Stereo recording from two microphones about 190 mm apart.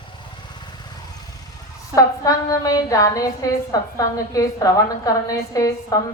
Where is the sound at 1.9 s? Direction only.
15° left (ahead or behind).